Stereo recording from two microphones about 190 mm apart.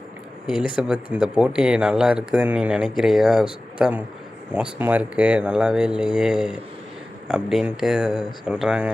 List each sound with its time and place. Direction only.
0.8 s speech: 5° right (ahead or behind)